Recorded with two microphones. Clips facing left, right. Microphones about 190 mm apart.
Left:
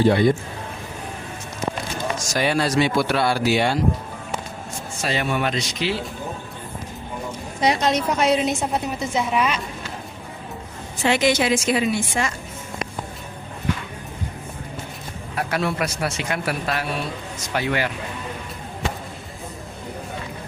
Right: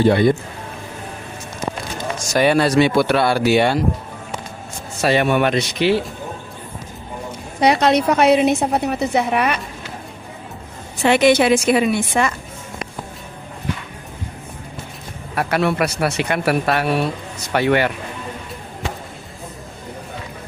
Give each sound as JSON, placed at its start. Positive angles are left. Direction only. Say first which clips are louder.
{"t": 0.0, "sound": "speech", "louder": "right 3 dB", "side_deg": -60}
{"t": 2.3, "sound": "speech", "louder": "right 6 dB", "side_deg": -60}
{"t": 4.9, "sound": "speech", "louder": "right 8 dB", "side_deg": -65}
{"t": 7.6, "sound": "speech", "louder": "right 5 dB", "side_deg": -65}
{"t": 11.0, "sound": "speech", "louder": "right 6 dB", "side_deg": -60}
{"t": 15.4, "sound": "speech", "louder": "right 5 dB", "side_deg": -65}